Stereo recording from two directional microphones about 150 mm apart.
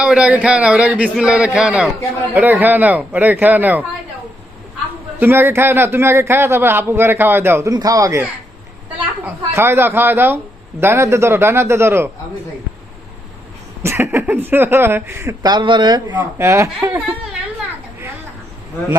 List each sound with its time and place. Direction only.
0.0 s speech: 5° right (ahead or behind)
5.2 s speech: 15° right (ahead or behind)
13.8 s speech: 15° right (ahead or behind)
15.4 s speech: 30° right (ahead or behind)
16.1 s speech: 20° right (ahead or behind)